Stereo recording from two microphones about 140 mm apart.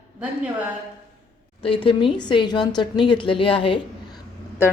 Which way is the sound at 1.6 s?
40° left (ahead or behind).